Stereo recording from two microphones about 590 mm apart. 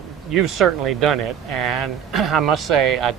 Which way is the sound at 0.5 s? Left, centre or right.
Right.